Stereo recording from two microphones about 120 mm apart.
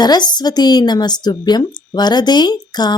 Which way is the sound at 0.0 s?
35° left (ahead or behind).